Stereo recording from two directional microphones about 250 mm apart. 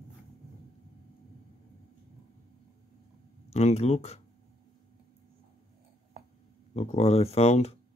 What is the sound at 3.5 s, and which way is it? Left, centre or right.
Speech, left.